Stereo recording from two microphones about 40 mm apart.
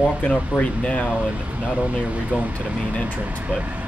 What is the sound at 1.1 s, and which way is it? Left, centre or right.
Speech, right.